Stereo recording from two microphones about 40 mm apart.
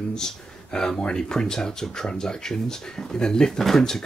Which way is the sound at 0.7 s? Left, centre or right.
Left.